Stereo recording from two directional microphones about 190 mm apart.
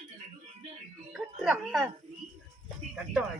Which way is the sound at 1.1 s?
Centre (ahead or behind).